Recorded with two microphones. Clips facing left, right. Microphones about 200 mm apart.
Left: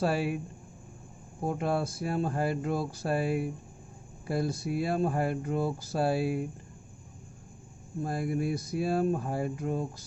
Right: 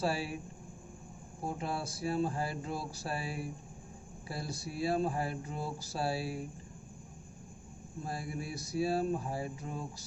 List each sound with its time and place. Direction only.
0.0 s speech: 55° left (ahead or behind)
1.5 s speech: 55° left (ahead or behind)
8.0 s speech: 50° left (ahead or behind)